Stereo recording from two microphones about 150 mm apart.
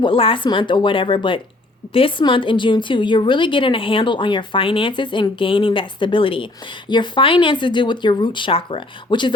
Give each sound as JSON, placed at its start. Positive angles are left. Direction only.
{"t": 0.0, "sound": "a woman's voice", "side_deg": 35}